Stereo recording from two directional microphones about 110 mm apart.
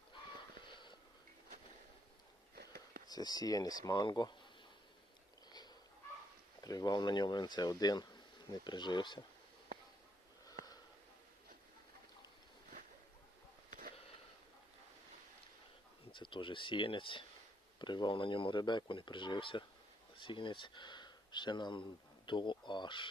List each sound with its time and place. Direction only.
0.6 s wheeze: 45° left (ahead or behind)
3.1 s speech: 35° left (ahead or behind)
5.5 s a sound: 40° left (ahead or behind)
6.6 s speech: 35° left (ahead or behind)
10.4 s sniff: 35° left (ahead or behind)
16.1 s speech: 50° left (ahead or behind)